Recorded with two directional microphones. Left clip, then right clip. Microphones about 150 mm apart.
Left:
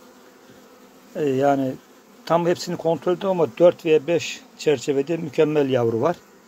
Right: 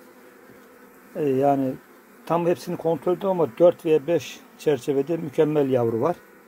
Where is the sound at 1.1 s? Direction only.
10° right (ahead or behind).